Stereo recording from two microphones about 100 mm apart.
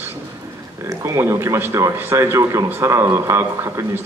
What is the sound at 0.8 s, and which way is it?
Speech, 30° right (ahead or behind).